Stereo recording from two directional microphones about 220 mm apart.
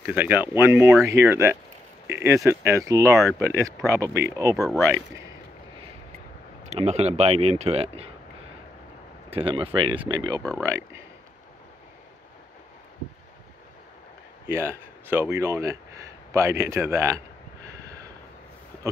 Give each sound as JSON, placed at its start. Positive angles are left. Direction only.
{"t": 0.0, "sound": "speech", "side_deg": -10}
{"t": 4.6, "sound": "speech", "side_deg": 0}
{"t": 6.7, "sound": "speech", "side_deg": -30}
{"t": 9.3, "sound": "speech", "side_deg": -25}
{"t": 14.5, "sound": "speech", "side_deg": -10}
{"t": 17.6, "sound": "a sound", "side_deg": -15}